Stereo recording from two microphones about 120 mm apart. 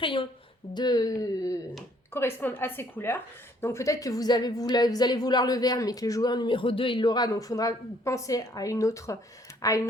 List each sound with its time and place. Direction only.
0.0 s a woman's voice: 45° left (ahead or behind)
2.1 s a woman's voice: 20° left (ahead or behind)